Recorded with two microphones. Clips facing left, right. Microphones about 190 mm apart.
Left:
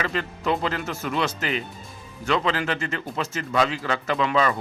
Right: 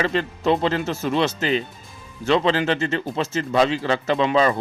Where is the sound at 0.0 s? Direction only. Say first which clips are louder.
Right 5 dB; 30° right (ahead or behind).